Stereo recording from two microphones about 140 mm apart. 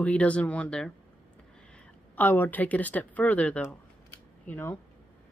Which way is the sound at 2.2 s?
15° left (ahead or behind).